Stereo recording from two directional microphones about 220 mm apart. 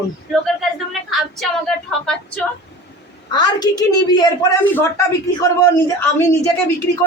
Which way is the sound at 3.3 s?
20° left (ahead or behind).